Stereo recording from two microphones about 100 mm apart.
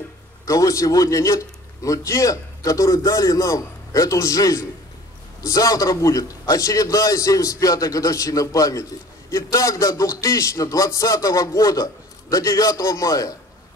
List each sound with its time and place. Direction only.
0.5 s a man's voice: 30° left (ahead or behind)